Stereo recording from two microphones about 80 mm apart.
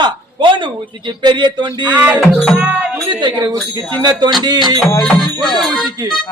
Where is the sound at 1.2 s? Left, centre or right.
Right.